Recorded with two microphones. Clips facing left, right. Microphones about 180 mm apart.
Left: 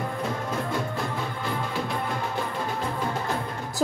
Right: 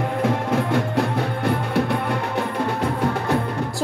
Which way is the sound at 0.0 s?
70° right (ahead or behind).